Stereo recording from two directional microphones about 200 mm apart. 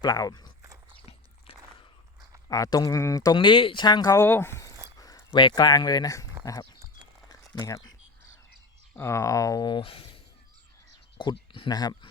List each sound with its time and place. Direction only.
0.0 s speech: 20° left (ahead or behind)
0.6 s biting: 15° right (ahead or behind)
1.0 s biting: 30° left (ahead or behind)
2.5 s speech: 20° left (ahead or behind)
7.3 s a sound: 20° left (ahead or behind)
9.0 s speech: 15° left (ahead or behind)
11.2 s speech: 25° left (ahead or behind)